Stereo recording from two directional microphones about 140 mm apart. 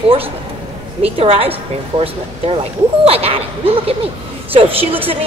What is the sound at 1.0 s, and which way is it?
A woman's voice, 45° right (ahead or behind).